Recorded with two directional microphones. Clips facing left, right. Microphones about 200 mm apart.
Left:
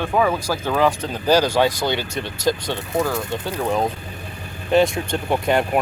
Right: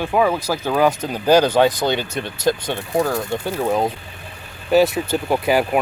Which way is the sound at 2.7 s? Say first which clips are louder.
Right 2 dB; 15° right (ahead or behind).